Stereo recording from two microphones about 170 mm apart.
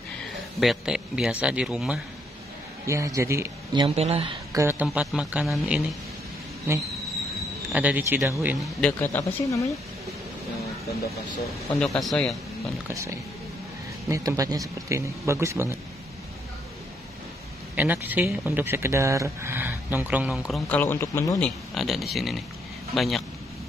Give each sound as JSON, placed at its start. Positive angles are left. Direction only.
{"t": 0.6, "sound": "speech", "side_deg": -5}
{"t": 2.9, "sound": "speech", "side_deg": -15}
{"t": 3.7, "sound": "speech", "side_deg": -35}
{"t": 4.5, "sound": "speech", "side_deg": -15}
{"t": 9.0, "sound": "speech", "side_deg": 15}
{"t": 11.8, "sound": "speech", "side_deg": 0}
{"t": 14.0, "sound": "speech", "side_deg": -20}
{"t": 17.7, "sound": "speech", "side_deg": -10}
{"t": 20.6, "sound": "speech", "side_deg": 10}
{"t": 21.4, "sound": "speech", "side_deg": 0}